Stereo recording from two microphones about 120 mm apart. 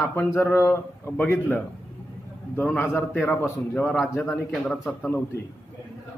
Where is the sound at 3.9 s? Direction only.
Centre (ahead or behind).